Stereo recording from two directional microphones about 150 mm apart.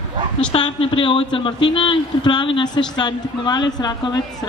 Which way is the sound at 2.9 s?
30° left (ahead or behind).